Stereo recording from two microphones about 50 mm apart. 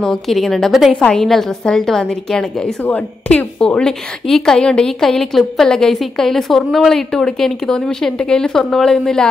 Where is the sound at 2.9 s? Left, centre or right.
Left.